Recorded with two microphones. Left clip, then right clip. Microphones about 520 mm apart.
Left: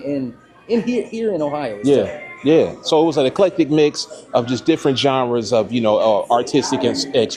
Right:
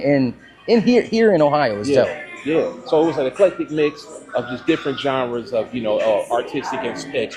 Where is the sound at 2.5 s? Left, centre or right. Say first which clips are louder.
Left 4 dB; left.